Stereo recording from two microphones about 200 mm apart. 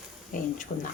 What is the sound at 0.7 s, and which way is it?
Speech, 35° left (ahead or behind).